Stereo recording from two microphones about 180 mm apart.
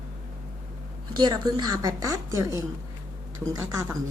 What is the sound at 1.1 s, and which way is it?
A woman's voice, 25° right (ahead or behind).